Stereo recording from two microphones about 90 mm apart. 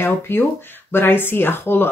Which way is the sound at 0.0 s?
25° left (ahead or behind).